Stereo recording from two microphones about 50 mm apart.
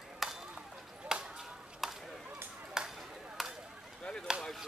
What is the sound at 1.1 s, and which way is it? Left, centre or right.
Chop, centre.